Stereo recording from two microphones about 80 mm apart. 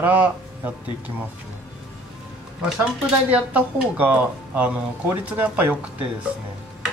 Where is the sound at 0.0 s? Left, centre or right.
Right.